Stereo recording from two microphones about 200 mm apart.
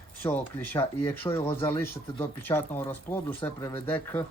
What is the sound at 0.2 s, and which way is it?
Speech, 10° left (ahead or behind).